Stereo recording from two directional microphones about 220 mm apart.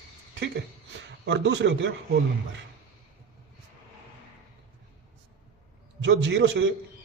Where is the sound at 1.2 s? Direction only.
55° right (ahead or behind).